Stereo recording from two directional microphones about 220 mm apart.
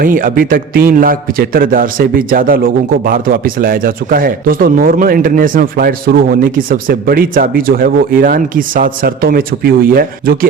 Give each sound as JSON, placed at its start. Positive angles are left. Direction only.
{"t": 0.0, "sound": "a man's voice", "side_deg": -40}